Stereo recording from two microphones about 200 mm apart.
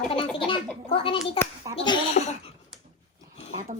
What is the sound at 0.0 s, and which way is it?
A woman's voice, 25° left (ahead or behind).